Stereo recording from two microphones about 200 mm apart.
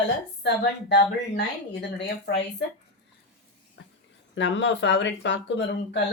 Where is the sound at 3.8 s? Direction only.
65° left (ahead or behind).